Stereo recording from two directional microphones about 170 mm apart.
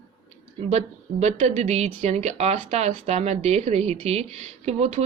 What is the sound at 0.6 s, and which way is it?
Speech, 40° right (ahead or behind).